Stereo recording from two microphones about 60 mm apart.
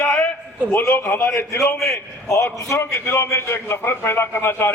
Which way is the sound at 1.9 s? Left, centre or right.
Left.